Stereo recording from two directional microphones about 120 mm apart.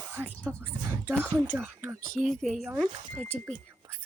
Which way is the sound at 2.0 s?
90° right.